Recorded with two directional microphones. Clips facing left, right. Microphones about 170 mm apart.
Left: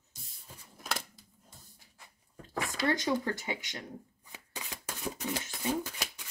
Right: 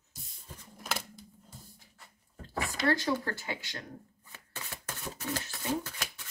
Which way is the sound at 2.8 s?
15° left (ahead or behind).